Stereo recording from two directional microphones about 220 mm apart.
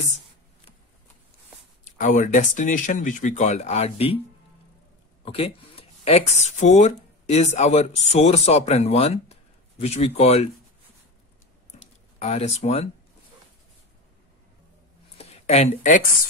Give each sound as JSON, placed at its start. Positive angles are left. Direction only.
{"t": 1.9, "sound": "speech", "side_deg": 35}
{"t": 5.2, "sound": "speech", "side_deg": 25}
{"t": 12.2, "sound": "speech", "side_deg": 30}
{"t": 15.1, "sound": "a sound", "side_deg": 30}